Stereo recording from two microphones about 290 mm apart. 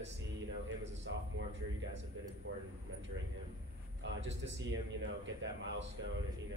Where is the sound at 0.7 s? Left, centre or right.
Right.